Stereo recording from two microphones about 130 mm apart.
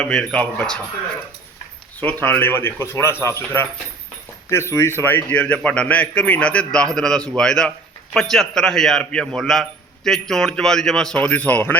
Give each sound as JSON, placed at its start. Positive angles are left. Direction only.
{"t": 0.0, "sound": "a man's voice", "side_deg": 5}
{"t": 2.0, "sound": "a man's voice", "side_deg": 15}